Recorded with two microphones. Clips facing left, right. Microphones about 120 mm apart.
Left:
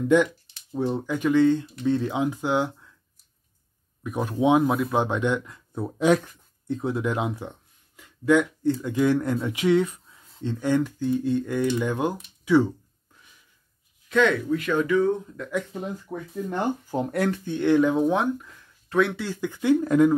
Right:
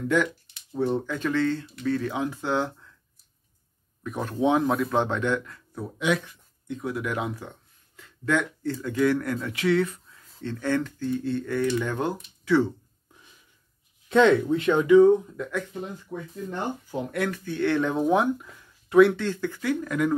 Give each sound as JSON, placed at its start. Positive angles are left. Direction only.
{"t": 0.7, "sound": "speech", "side_deg": 15}
{"t": 4.0, "sound": "speech", "side_deg": 10}
{"t": 5.9, "sound": "speech", "side_deg": 40}
{"t": 6.8, "sound": "speech", "side_deg": 25}
{"t": 14.0, "sound": "speech", "side_deg": -30}
{"t": 15.4, "sound": "speech", "side_deg": -5}
{"t": 16.1, "sound": "speech", "side_deg": 45}
{"t": 17.5, "sound": "speech", "side_deg": 15}
{"t": 17.9, "sound": "speech", "side_deg": 0}
{"t": 19.2, "sound": "speech", "side_deg": 15}